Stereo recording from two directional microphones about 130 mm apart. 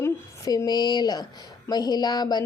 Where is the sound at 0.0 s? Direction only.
25° left (ahead or behind).